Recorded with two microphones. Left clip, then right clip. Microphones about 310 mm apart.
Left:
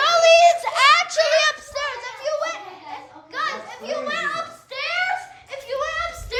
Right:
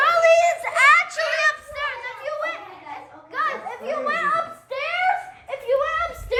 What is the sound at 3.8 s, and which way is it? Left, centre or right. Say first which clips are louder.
Children playing: right 2 dB; centre.